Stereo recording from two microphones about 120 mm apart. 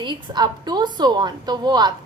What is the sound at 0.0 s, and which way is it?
A woman's voice, 40° right (ahead or behind).